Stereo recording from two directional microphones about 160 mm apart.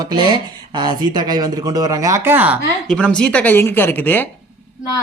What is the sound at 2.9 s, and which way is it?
Speech, 5° left (ahead or behind).